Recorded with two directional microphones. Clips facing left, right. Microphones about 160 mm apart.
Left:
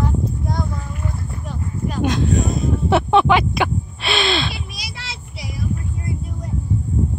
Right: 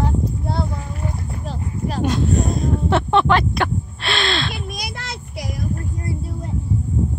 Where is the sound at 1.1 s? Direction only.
30° right (ahead or behind).